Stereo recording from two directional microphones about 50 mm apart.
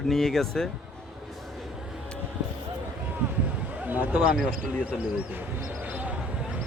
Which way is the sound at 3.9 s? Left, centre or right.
Right.